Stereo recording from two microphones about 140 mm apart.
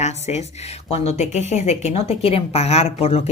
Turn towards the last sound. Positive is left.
turn(degrees=45)  # may be behind; listen again after turning